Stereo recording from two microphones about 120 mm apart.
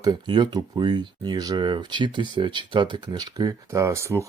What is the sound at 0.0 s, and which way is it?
Speech, 35° right (ahead or behind).